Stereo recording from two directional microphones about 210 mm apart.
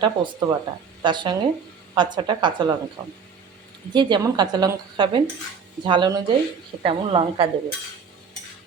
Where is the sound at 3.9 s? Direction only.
20° right (ahead or behind).